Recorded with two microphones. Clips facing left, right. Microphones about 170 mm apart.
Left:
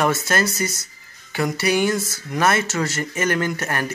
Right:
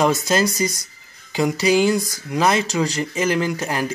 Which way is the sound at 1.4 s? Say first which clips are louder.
Right 3 dB; 20° right (ahead or behind).